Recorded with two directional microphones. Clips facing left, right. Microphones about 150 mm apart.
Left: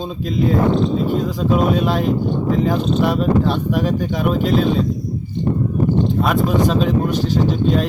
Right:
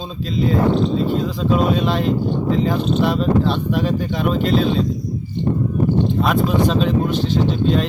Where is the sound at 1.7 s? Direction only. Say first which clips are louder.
Left 1 dB; 5° left (ahead or behind).